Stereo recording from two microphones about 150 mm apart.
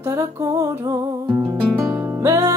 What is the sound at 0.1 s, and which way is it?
Music, 25° right (ahead or behind).